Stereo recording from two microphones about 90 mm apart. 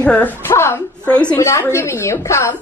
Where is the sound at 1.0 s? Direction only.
15° left (ahead or behind).